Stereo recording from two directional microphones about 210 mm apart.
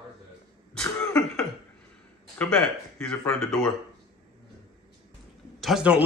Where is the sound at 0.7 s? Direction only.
5° left (ahead or behind).